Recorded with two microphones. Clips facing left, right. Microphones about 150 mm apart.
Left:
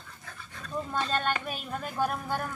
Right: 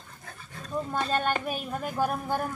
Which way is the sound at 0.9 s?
10° right (ahead or behind).